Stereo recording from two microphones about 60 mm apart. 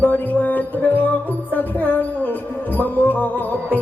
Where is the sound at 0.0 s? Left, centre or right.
Left.